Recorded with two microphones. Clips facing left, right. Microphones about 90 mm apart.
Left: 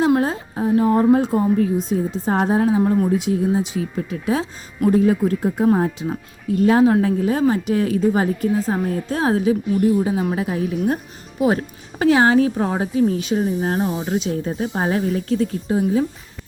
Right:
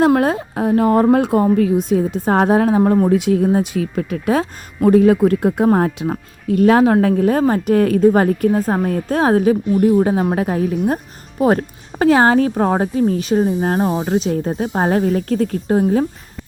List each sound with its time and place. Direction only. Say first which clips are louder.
0.0 s speech: right 4 dB; 60° right (ahead or behind)
4.9 s speech: right 5 dB; 75° right (ahead or behind); by 16.0 s 50° right (ahead or behind)